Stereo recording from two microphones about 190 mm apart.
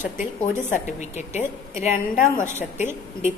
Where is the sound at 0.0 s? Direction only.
40° left (ahead or behind).